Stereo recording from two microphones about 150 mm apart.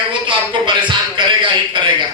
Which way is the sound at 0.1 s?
35° right (ahead or behind).